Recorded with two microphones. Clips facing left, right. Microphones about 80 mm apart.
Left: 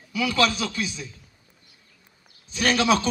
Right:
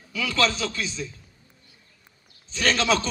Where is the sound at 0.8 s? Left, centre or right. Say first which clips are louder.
Left 1 dB; right.